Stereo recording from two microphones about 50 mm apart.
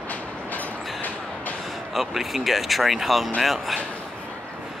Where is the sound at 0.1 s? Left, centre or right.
Left.